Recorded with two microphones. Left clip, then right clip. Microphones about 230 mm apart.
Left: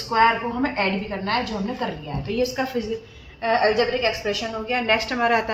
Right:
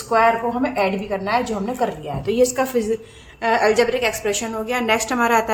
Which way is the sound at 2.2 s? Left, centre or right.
Right.